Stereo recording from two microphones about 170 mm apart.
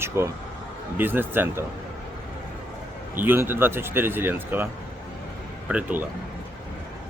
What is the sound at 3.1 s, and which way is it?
Speech, 10° right (ahead or behind).